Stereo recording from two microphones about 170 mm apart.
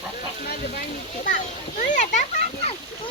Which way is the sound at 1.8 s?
45° left (ahead or behind).